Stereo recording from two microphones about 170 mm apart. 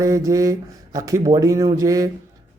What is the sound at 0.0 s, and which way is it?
Speech, 20° right (ahead or behind).